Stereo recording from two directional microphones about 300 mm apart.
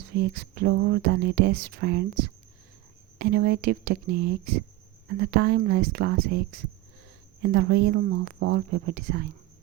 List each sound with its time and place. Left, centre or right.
0.1 s speech: right